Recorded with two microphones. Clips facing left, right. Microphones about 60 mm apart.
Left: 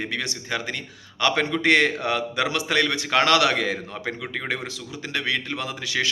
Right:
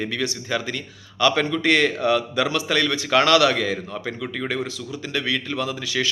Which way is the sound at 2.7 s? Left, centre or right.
Left.